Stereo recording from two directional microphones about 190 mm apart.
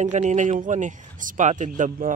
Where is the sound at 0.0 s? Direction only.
40° right (ahead or behind).